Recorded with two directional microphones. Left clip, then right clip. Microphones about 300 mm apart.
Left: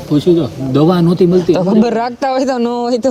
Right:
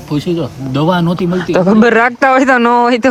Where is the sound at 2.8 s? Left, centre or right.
Right.